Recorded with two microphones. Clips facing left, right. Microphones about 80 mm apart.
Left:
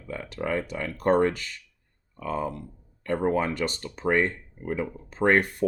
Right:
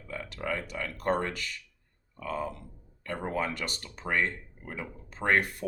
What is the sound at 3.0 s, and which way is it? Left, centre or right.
Speech, left.